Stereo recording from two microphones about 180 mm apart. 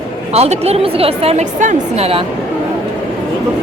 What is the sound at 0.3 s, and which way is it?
A woman's voice, 35° right (ahead or behind).